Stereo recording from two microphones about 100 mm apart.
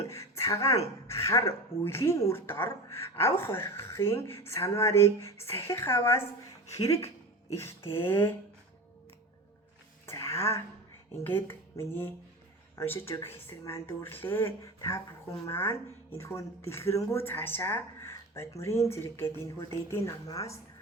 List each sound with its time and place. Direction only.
0.1 s a woman's voice: 30° left (ahead or behind)
10.1 s a woman's voice: 30° left (ahead or behind)